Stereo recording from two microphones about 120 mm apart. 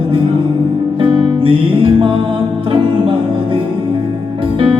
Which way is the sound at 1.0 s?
50° right (ahead or behind).